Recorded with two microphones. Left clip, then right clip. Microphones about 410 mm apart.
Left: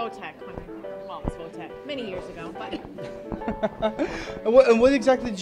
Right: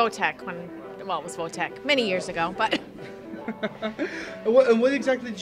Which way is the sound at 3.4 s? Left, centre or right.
Left.